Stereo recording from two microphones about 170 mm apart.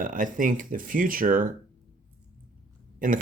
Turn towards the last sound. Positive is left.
turn(degrees=-55)  # may be behind; listen again after turning